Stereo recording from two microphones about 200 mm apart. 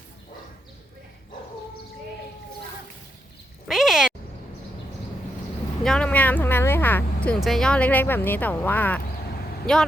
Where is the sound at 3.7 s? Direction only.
Centre (ahead or behind).